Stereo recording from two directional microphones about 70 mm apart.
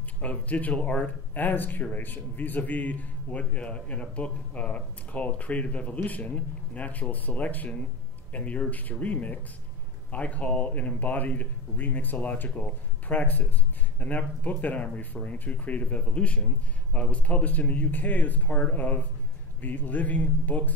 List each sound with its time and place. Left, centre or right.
0.2 s speech: left